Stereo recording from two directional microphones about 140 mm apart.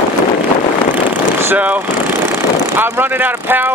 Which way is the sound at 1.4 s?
10° right (ahead or behind).